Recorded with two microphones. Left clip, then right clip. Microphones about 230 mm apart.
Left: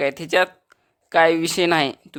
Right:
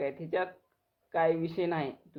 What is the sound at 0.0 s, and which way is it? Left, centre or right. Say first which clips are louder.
Speech: left 13 dB; left.